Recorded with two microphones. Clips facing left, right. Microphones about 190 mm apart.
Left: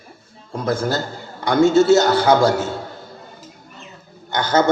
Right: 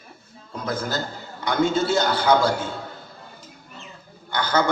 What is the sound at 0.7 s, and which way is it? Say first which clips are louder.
Speech: left 7 dB; 25° left (ahead or behind).